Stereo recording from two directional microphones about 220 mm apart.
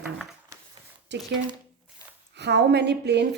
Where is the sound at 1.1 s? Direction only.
50° right (ahead or behind).